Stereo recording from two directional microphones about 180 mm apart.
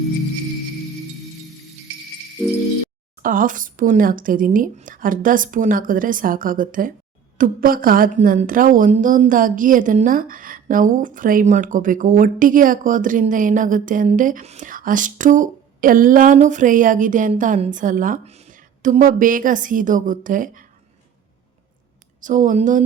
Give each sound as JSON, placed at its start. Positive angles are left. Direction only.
{"t": 3.2, "sound": "a woman's voice", "side_deg": -50}
{"t": 22.2, "sound": "a woman's voice", "side_deg": -45}